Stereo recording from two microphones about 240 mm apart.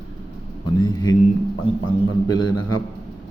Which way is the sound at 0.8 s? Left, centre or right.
Centre.